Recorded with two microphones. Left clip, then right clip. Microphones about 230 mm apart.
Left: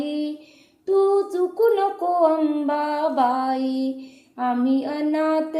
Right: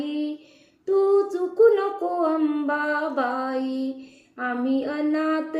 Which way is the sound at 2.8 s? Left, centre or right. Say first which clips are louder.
Left 4 dB; centre.